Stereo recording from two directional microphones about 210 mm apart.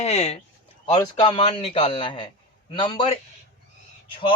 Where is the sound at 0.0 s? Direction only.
30° left (ahead or behind).